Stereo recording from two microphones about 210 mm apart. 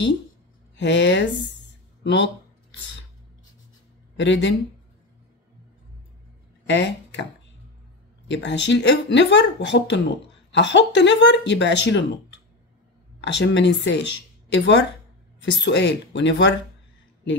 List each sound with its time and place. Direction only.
0.7 s speech: 60° left (ahead or behind)
4.2 s speech: 60° left (ahead or behind)
6.7 s speech: 60° left (ahead or behind)
8.3 s speech: 55° left (ahead or behind)